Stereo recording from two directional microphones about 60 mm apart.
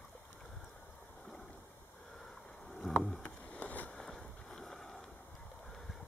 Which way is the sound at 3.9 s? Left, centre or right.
Centre.